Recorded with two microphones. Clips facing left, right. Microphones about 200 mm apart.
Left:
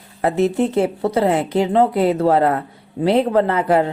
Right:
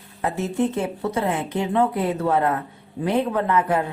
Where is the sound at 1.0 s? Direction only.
35° left (ahead or behind).